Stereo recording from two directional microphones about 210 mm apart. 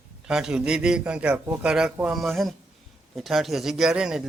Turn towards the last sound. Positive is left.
turn(degrees=-5)  # may be behind; listen again after turning